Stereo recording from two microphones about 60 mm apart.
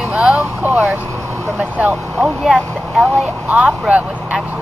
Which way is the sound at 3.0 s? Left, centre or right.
Right.